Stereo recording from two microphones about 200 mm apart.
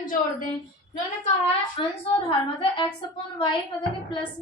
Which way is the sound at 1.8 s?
25° left (ahead or behind).